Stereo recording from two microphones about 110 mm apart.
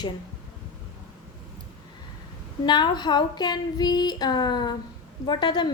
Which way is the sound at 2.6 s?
45° left (ahead or behind).